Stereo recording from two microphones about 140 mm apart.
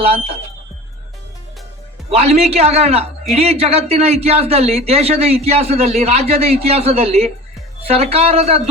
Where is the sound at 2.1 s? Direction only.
50° right (ahead or behind).